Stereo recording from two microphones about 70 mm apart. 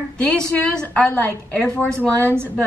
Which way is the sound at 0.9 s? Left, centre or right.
Left.